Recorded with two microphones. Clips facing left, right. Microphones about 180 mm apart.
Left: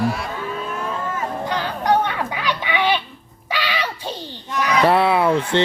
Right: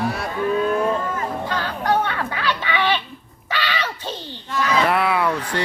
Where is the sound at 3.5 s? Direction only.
10° left (ahead or behind).